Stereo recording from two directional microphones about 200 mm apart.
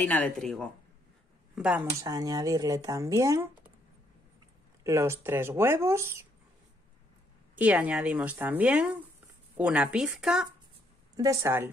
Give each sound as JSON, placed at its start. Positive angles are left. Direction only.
{"t": 0.0, "sound": "a woman's voice", "side_deg": 5}
{"t": 2.0, "sound": "speech", "side_deg": -15}
{"t": 4.8, "sound": "speech", "side_deg": -15}
{"t": 7.5, "sound": "speech", "side_deg": -5}
{"t": 11.1, "sound": "speech", "side_deg": -15}